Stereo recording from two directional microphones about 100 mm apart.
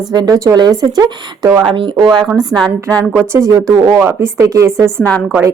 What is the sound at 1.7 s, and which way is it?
Speech, 60° right (ahead or behind).